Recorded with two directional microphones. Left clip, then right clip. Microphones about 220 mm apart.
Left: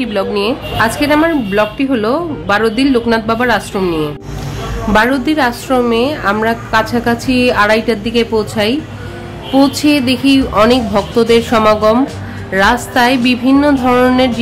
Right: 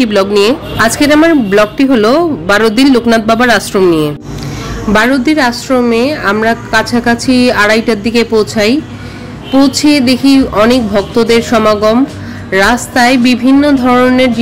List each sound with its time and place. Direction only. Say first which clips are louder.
0.0 s a woman's voice: right 7 dB; 25° right (ahead or behind); by 14.3 s 10° right (ahead or behind)